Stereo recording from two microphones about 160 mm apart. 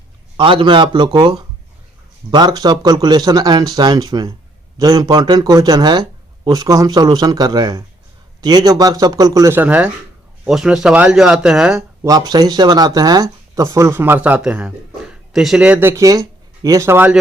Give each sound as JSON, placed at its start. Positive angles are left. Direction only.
{"t": 0.3, "sound": "speech", "side_deg": -30}
{"t": 12.0, "sound": "speech", "side_deg": -25}